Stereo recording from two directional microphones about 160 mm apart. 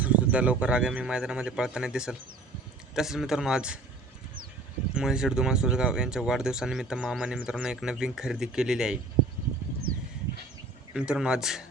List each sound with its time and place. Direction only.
0.0 s speech: 10° right (ahead or behind)
4.9 s speech: 5° right (ahead or behind)
10.9 s speech: 5° right (ahead or behind)